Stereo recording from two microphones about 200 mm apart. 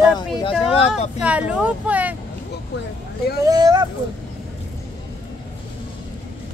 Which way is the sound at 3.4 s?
20° right (ahead or behind).